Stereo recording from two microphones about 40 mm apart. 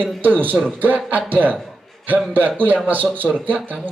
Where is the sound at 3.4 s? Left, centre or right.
Right.